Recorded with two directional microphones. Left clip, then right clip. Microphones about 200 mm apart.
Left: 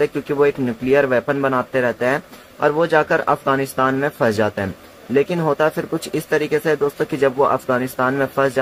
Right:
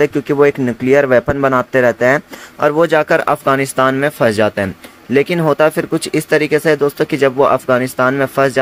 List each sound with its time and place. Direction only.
0.0 s speech: 25° right (ahead or behind)